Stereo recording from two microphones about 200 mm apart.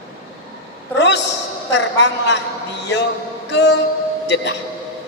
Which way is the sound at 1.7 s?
60° left (ahead or behind).